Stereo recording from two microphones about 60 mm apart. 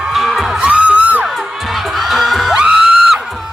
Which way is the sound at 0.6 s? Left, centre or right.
Centre.